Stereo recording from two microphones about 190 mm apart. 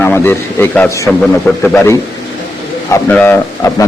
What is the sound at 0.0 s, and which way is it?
A man's voice, 10° left (ahead or behind).